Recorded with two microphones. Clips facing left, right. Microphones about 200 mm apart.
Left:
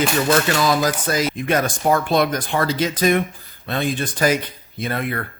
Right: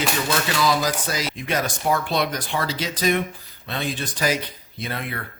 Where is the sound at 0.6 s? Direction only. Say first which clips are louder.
Left 3 dB; 50° left (ahead or behind).